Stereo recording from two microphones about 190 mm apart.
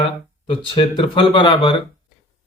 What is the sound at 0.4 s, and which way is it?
Speech, 25° left (ahead or behind).